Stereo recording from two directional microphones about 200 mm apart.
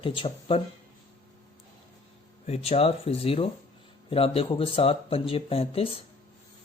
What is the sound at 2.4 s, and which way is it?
Speech, 30° left (ahead or behind).